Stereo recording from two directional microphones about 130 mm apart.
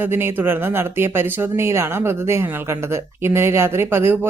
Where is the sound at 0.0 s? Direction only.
15° right (ahead or behind).